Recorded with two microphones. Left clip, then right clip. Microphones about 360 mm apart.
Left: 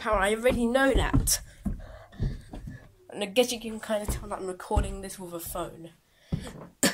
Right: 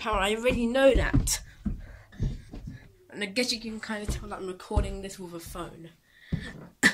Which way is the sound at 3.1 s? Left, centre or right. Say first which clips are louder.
Left 4 dB; centre.